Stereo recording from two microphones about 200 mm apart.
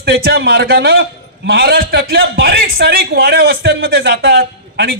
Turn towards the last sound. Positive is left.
turn(degrees=-50)  # may be behind; listen again after turning